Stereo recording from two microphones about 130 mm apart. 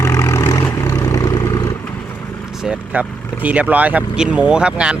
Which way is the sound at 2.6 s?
10° right (ahead or behind).